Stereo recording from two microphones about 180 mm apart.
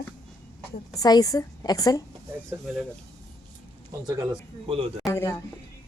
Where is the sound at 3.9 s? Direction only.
20° right (ahead or behind).